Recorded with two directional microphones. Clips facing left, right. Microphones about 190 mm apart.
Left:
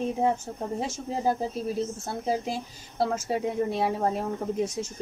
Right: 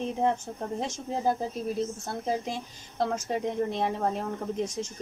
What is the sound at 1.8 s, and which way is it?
A woman's voice, 5° left (ahead or behind).